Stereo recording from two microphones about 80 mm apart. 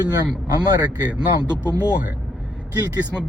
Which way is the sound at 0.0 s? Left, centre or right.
Right.